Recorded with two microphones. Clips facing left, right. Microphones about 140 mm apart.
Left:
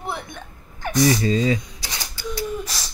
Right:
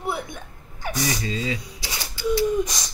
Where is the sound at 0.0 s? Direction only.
10° right (ahead or behind).